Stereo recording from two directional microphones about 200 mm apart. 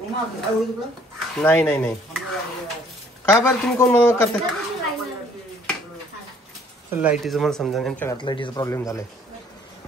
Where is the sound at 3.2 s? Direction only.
15° left (ahead or behind).